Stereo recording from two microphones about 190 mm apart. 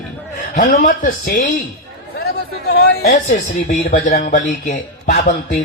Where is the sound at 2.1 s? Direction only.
55° left (ahead or behind).